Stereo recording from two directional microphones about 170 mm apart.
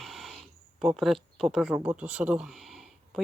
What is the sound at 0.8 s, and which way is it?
Speech, centre (ahead or behind).